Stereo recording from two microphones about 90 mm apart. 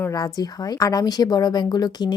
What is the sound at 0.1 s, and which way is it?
A woman's voice, 45° left (ahead or behind).